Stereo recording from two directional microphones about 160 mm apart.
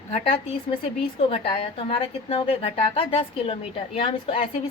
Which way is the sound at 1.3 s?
35° left (ahead or behind).